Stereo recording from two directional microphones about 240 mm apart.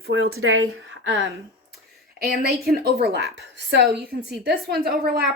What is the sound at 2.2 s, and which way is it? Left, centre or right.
A woman's voice, right.